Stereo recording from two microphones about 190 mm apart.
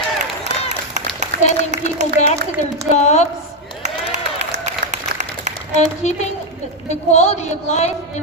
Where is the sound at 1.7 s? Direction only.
40° right (ahead or behind).